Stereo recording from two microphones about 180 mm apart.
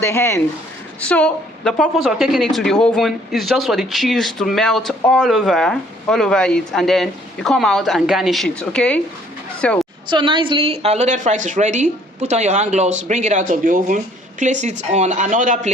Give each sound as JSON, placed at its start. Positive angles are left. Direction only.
{"t": 0.0, "sound": "a woman's voice", "side_deg": 15}
{"t": 10.1, "sound": "a woman's voice", "side_deg": -25}